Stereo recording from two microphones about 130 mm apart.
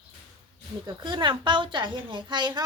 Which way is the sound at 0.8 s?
35° right (ahead or behind).